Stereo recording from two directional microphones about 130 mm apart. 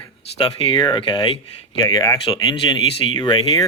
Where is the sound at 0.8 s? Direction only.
35° left (ahead or behind).